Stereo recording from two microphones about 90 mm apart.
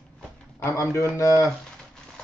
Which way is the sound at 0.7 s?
35° left (ahead or behind).